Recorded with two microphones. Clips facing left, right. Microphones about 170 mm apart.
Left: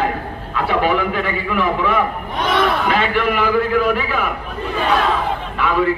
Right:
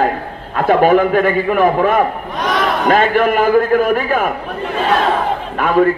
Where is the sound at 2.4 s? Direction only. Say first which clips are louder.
Even; 25° left (ahead or behind).